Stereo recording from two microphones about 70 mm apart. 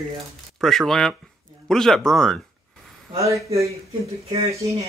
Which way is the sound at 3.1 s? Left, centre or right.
Right.